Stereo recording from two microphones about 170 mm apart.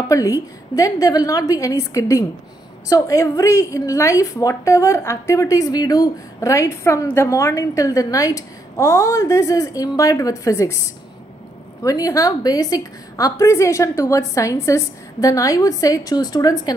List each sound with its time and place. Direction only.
0.1 s a woman's voice: 20° left (ahead or behind)